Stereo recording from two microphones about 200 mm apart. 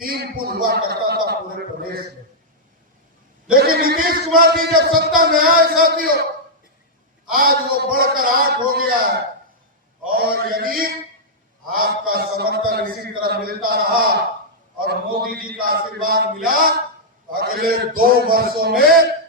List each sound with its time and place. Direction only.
0.0 s a sound: 45° right (ahead or behind)
3.5 s a man's voice: 45° right (ahead or behind)
7.3 s a man's voice: 45° right (ahead or behind)
10.1 s a man's voice: 45° right (ahead or behind)